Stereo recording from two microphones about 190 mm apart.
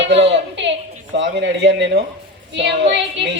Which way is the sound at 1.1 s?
70° right (ahead or behind).